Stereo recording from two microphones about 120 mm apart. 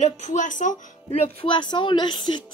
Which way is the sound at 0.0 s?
75° left (ahead or behind).